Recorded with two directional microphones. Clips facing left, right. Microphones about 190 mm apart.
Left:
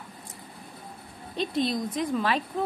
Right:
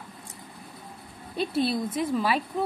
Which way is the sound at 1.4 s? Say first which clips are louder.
Right 1 dB; 5° right (ahead or behind).